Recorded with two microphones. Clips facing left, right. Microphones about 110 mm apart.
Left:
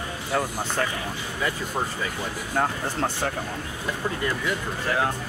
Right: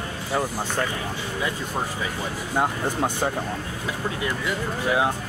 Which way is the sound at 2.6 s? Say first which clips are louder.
Right 2 dB; 15° right (ahead or behind).